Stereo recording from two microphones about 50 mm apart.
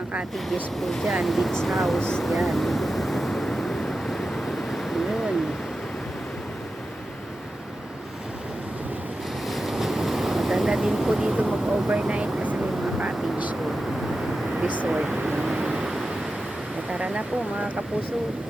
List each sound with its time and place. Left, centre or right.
0.3 s speech: centre
2.0 s speech: centre
2.2 s vehicle: centre
9.5 s ocean: centre
10.7 s vehicle: centre
11.9 s vehicle: right
14.8 s a sound: centre
16.9 s speech: right